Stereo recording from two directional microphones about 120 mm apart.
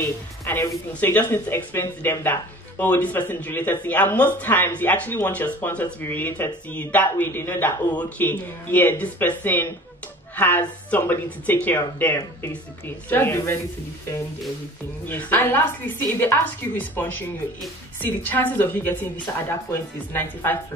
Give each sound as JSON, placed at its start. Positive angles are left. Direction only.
{"t": 0.0, "sound": "speech", "side_deg": 20}
{"t": 15.0, "sound": "speech", "side_deg": 15}